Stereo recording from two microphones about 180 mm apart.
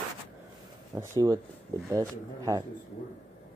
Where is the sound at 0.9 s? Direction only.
15° right (ahead or behind).